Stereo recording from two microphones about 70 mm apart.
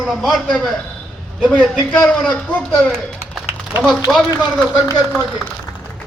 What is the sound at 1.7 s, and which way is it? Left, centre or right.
Speech, centre.